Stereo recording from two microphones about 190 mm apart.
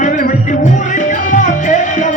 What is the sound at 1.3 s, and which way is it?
Music, 40° left (ahead or behind).